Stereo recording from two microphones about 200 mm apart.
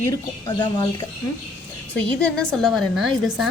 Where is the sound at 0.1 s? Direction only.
20° left (ahead or behind).